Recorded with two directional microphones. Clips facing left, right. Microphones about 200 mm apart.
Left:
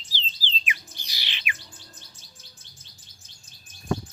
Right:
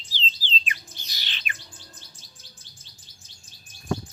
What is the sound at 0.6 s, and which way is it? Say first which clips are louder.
Bird: left 2 dB; 10° left (ahead or behind).